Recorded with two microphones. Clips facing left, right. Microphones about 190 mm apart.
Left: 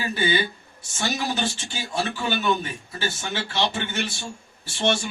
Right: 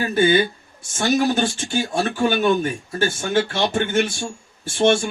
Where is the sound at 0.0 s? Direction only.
50° right (ahead or behind).